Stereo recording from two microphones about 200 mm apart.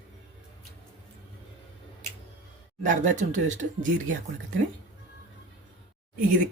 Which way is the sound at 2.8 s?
40° right (ahead or behind).